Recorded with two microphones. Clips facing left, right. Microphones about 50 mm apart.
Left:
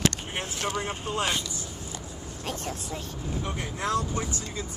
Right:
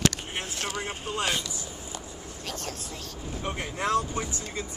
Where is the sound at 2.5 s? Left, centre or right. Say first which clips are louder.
Left 3 dB; left.